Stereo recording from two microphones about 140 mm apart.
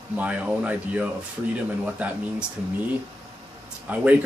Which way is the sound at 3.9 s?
10° right (ahead or behind).